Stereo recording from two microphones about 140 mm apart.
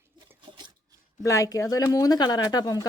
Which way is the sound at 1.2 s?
25° left (ahead or behind).